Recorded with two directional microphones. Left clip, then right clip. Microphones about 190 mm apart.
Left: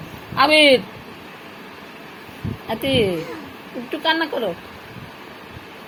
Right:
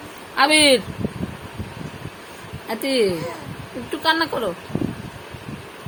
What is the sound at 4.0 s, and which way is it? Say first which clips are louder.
Speech: even; 25° right (ahead or behind).